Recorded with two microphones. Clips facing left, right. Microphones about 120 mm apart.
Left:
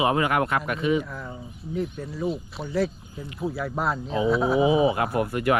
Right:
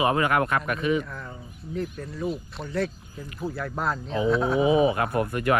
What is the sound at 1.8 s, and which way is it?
Speech, centre (ahead or behind).